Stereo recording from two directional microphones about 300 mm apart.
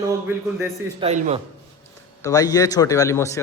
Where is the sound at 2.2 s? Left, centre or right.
Centre.